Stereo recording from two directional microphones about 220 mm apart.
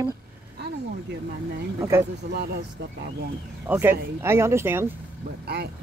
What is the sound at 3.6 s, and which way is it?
Speech, 10° right (ahead or behind).